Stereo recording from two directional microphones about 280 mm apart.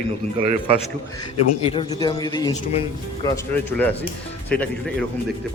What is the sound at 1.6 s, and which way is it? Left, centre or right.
A man's voice, centre.